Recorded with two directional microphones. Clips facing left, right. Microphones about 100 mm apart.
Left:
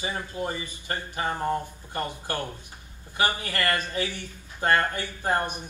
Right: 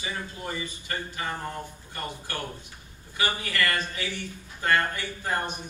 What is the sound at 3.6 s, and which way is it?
A man's voice, 45° left (ahead or behind).